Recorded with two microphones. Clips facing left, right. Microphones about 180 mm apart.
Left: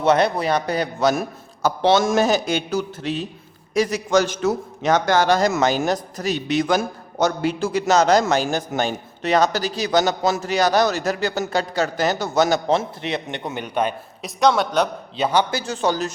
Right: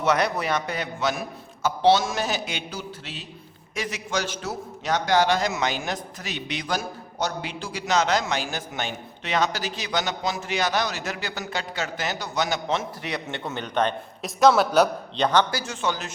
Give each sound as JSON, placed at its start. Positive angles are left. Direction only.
{"t": 0.0, "sound": "a man's voice", "side_deg": 30}
{"t": 15.1, "sound": "a man's voice", "side_deg": 10}
{"t": 15.4, "sound": "a man's voice", "side_deg": 30}